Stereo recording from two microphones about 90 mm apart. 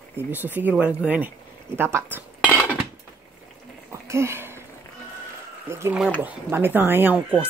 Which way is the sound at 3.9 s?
30° right (ahead or behind).